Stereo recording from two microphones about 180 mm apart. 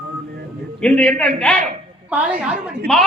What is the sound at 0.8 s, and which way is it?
Speech, 5° left (ahead or behind).